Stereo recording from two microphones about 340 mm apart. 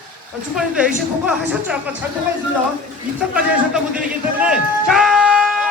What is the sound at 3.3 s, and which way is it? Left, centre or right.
Music, centre.